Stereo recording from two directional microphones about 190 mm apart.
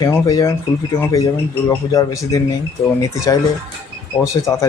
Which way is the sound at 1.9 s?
20° left (ahead or behind).